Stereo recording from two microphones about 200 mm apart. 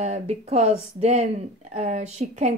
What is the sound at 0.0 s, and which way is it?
Speech, 30° right (ahead or behind).